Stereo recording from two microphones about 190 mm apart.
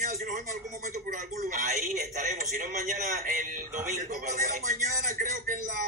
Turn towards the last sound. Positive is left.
turn(degrees=-40)  # may be behind; listen again after turning